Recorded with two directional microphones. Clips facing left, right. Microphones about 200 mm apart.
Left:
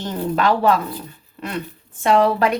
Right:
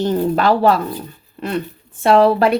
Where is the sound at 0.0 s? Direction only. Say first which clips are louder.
Right 5 dB; 35° right (ahead or behind).